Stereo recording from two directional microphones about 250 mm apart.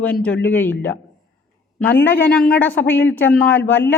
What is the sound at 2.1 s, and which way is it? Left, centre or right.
Speech, centre.